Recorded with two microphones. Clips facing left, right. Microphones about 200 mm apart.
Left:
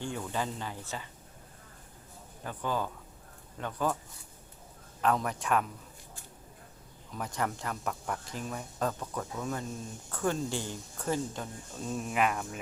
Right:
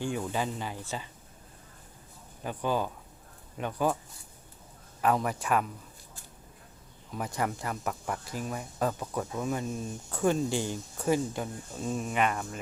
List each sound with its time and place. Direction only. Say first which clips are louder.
0.0 s speech: right 3 dB; 10° right (ahead or behind)
2.4 s speech: right 3 dB; 15° right (ahead or behind)
5.0 s speech: right 2 dB; 5° right (ahead or behind)
7.2 s speech: right 2 dB; 10° right (ahead or behind)
11.9 s speech: right 1 dB; centre (ahead or behind)